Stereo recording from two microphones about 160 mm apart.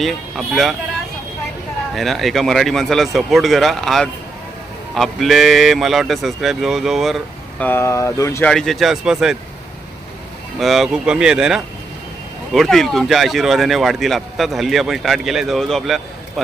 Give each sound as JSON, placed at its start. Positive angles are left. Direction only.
{"t": 0.0, "sound": "speech", "side_deg": 0}
{"t": 2.0, "sound": "speech", "side_deg": 0}
{"t": 7.6, "sound": "speech", "side_deg": 15}
{"t": 8.4, "sound": "speech", "side_deg": 5}
{"t": 10.6, "sound": "speech", "side_deg": 0}